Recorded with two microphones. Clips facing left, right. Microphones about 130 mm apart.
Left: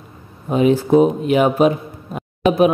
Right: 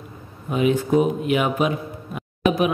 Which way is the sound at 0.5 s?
35° left (ahead or behind).